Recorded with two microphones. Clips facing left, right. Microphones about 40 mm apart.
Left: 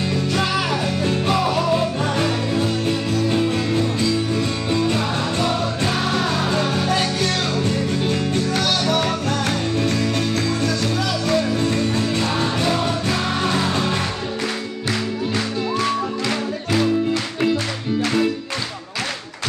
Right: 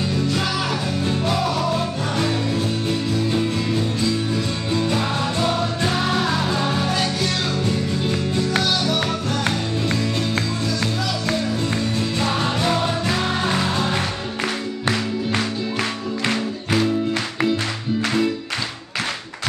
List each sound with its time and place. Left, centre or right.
1.0 s music: centre
4.7 s music: centre
6.6 s music: centre
6.9 s music: centre
11.3 s music: centre
12.0 s music: centre
15.8 s music: centre